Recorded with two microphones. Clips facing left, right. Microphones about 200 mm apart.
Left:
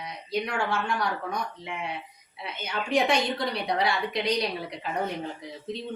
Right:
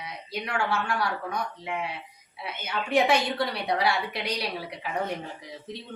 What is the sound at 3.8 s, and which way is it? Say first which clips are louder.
A woman's voice: left 1 dB; 5° right (ahead or behind).